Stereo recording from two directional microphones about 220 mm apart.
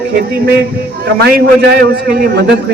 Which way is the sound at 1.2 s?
45° right (ahead or behind).